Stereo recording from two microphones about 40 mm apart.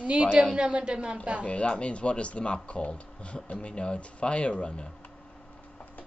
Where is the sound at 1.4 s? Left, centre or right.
Left.